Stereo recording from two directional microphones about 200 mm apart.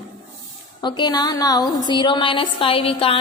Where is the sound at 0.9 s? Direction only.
20° left (ahead or behind).